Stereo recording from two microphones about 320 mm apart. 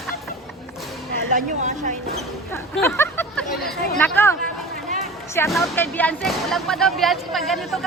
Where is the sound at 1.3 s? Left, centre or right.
Right.